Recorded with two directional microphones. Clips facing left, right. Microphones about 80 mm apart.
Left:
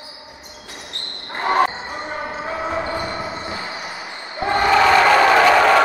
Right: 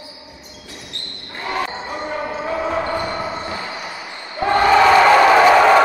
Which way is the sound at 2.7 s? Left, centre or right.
Centre.